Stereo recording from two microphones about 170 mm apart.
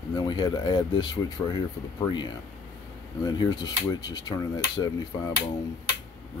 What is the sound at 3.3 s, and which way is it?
Speech, 25° left (ahead or behind).